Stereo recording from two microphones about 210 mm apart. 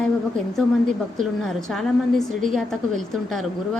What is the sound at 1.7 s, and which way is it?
A woman's voice, centre (ahead or behind).